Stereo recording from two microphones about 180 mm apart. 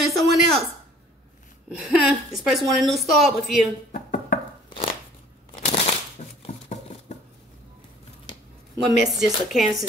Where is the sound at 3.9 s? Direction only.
50° left (ahead or behind).